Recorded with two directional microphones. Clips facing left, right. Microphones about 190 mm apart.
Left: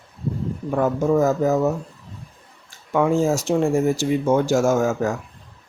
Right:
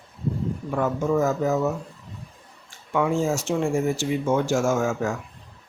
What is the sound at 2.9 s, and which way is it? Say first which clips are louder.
Speech: left 4 dB; 40° left (ahead or behind).